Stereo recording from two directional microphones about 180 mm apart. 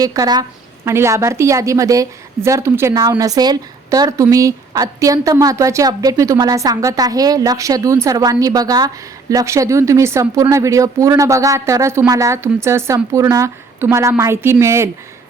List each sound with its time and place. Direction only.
0.0 s a woman's voice: 20° right (ahead or behind)